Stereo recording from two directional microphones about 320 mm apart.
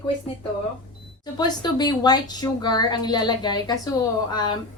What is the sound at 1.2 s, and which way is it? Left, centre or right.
A woman's voice, centre.